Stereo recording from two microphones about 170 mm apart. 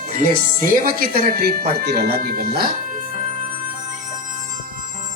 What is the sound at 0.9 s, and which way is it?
Speech, 60° right (ahead or behind).